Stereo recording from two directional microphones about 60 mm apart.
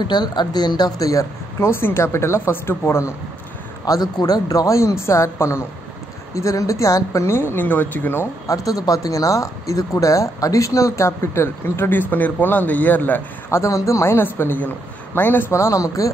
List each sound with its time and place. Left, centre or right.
0.9 s speech: left
1.6 s speech: left
3.8 s speech: left
6.3 s speech: left
7.2 s speech: left
8.5 s speech: left
13.5 s speech: left
14.1 s speech: left
15.5 s speech: left